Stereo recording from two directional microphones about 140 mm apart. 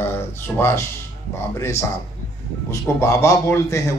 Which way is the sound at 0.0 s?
15° left (ahead or behind).